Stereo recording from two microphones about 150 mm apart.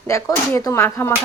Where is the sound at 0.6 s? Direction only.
20° left (ahead or behind).